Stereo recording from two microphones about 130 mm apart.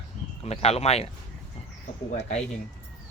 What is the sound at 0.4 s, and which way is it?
Speech, 50° left (ahead or behind).